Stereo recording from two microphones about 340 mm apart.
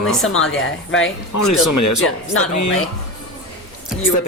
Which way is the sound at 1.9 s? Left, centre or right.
Left.